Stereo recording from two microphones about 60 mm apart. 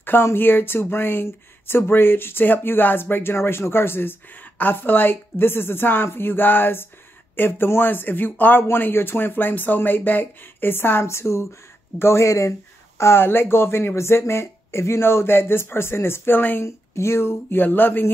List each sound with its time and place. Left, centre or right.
0.0 s speech: left
16.6 s speech: left